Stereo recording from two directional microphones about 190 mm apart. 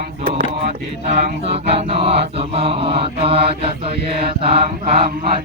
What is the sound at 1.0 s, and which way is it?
Mantra, 30° right (ahead or behind).